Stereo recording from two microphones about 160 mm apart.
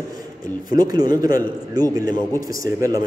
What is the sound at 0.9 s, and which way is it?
A man's voice, 25° right (ahead or behind).